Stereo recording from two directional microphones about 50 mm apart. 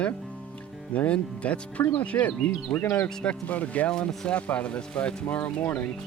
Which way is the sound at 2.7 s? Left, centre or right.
Centre.